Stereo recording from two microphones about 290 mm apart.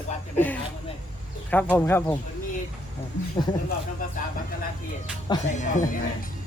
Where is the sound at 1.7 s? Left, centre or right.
Centre.